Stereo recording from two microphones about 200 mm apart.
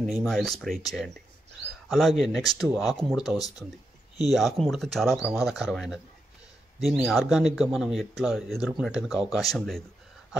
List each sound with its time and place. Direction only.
0.0 s speech: centre (ahead or behind)
3.3 s speech: 20° left (ahead or behind)
4.3 s speech: centre (ahead or behind)